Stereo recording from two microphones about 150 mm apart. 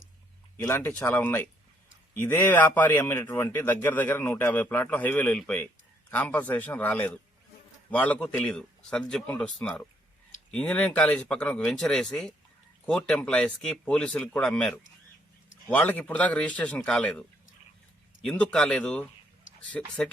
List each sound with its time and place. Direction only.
0.8 s a man's voice: 10° left (ahead or behind)
18.3 s a man's voice: 5° left (ahead or behind)